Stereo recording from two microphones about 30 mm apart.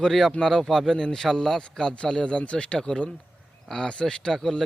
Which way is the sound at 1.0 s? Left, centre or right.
Left.